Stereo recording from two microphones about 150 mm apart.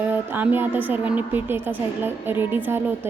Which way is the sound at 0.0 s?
10° right (ahead or behind).